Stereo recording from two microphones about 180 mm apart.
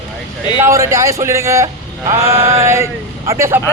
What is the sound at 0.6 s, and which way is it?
Speech, 15° right (ahead or behind).